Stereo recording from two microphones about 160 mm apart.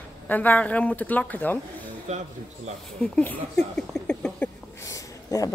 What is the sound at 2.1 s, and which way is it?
Speech, 45° right (ahead or behind).